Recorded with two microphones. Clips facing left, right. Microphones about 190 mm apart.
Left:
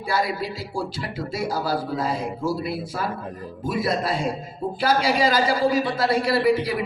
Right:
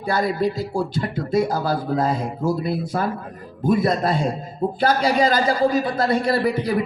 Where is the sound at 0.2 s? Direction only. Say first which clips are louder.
Right 5 dB; 45° right (ahead or behind).